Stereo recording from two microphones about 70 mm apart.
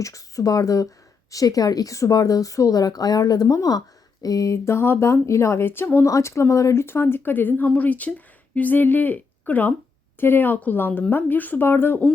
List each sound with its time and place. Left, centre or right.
0.0 s speech: left
6.1 s speech: left
6.8 s a woman's voice: left